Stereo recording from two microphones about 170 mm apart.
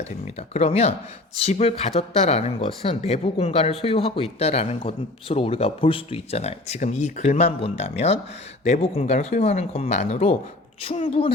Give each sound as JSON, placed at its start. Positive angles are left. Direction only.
{"t": 0.5, "sound": "speech", "side_deg": 40}